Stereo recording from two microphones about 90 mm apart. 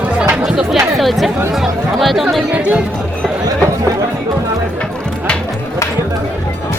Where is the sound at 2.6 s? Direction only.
15° right (ahead or behind).